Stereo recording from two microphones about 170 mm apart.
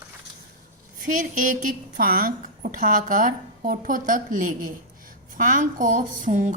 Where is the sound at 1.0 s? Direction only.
50° right (ahead or behind).